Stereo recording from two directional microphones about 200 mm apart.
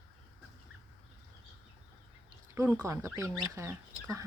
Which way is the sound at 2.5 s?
10° right (ahead or behind).